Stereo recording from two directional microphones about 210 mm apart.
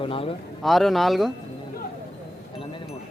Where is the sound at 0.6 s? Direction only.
Centre (ahead or behind).